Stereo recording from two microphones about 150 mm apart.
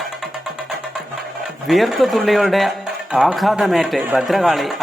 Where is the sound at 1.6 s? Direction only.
Centre (ahead or behind).